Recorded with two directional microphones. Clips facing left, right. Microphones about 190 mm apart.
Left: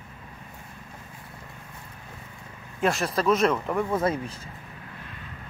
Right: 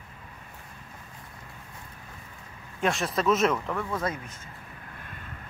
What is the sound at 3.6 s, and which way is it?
Speech, 20° left (ahead or behind).